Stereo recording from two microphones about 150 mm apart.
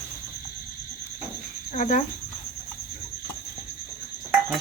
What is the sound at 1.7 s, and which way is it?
Speech, 55° left (ahead or behind).